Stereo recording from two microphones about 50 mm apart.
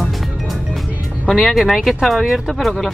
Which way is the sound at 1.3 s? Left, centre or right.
Centre.